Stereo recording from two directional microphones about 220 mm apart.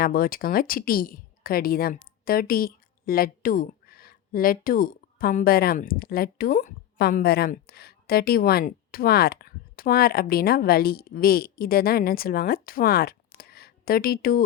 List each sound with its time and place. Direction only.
0.0 s a woman's voice: 40° left (ahead or behind)